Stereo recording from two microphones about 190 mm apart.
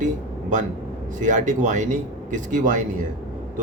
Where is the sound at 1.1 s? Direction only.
40° right (ahead or behind).